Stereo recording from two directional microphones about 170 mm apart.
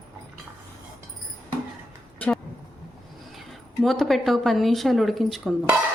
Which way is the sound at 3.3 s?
Centre (ahead or behind).